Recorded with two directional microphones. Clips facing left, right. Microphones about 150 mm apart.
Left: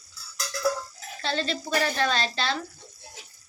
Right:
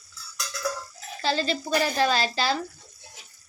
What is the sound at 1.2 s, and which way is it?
Speech, 5° right (ahead or behind).